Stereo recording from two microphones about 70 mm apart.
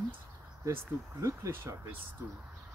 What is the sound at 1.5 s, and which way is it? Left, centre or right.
Speech, right.